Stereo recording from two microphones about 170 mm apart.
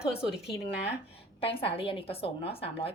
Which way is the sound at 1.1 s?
35° left (ahead or behind).